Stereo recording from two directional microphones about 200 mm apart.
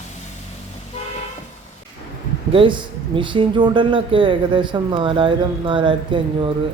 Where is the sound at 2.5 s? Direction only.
25° right (ahead or behind).